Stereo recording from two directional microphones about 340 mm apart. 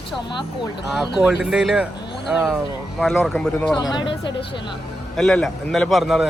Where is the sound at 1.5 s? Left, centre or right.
Centre.